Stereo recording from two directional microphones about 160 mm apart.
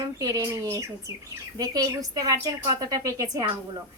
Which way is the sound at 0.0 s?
20° right (ahead or behind).